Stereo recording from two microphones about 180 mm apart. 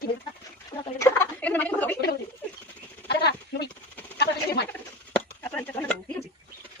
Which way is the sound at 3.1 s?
65° left (ahead or behind).